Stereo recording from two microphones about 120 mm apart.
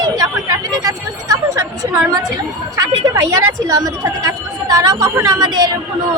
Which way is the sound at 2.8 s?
30° right (ahead or behind).